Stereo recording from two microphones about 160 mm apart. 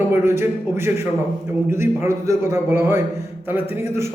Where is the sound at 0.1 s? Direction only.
15° right (ahead or behind).